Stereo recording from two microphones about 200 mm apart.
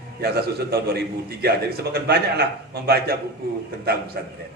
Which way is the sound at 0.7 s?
50° right (ahead or behind).